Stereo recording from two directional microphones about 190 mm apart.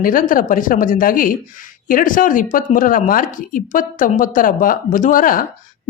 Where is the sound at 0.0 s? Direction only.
45° left (ahead or behind).